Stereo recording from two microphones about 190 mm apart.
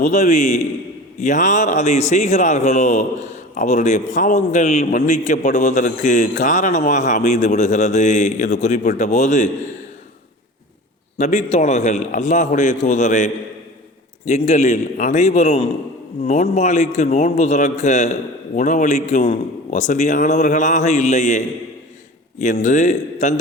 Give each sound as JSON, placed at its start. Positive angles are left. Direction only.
{"t": 0.0, "sound": "a man's voice", "side_deg": 40}
{"t": 11.2, "sound": "a man's voice", "side_deg": 40}